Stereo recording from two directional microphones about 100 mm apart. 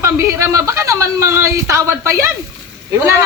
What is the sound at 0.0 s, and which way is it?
A man's voice, 30° right (ahead or behind).